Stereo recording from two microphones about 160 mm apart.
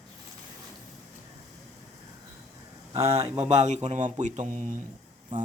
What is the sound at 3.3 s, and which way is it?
A man's voice, 45° right (ahead or behind).